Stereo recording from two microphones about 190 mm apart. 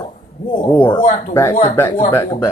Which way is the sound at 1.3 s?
15° left (ahead or behind).